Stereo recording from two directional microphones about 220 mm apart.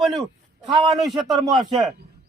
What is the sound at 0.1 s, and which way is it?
Speech, 20° right (ahead or behind).